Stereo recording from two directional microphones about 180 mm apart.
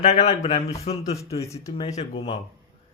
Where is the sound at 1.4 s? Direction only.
15° left (ahead or behind).